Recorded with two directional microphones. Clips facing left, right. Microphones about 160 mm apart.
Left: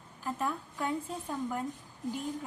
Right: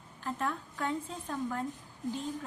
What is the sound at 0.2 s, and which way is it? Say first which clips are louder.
A woman's voice: left 1 dB; 5° left (ahead or behind).